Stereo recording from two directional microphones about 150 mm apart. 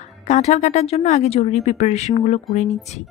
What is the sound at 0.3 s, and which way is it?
Speech, 50° left (ahead or behind).